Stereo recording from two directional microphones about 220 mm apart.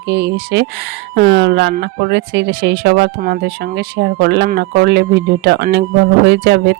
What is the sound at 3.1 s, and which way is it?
Speech, 40° right (ahead or behind).